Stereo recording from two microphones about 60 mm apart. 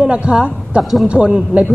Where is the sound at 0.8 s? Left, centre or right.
Centre.